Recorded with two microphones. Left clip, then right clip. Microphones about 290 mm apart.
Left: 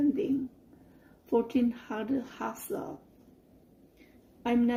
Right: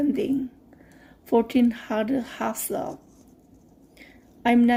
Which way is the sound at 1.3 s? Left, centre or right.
Right.